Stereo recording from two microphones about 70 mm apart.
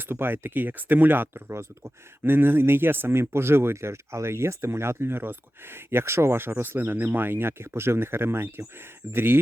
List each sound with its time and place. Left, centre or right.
0.0 s speech: right